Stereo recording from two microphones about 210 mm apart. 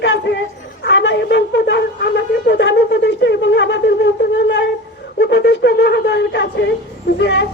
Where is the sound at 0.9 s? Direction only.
55° left (ahead or behind).